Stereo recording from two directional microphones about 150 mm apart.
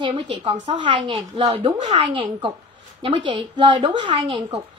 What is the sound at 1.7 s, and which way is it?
Speech, 50° right (ahead or behind).